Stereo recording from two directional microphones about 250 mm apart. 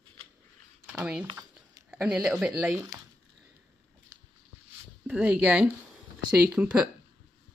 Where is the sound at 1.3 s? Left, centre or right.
Centre.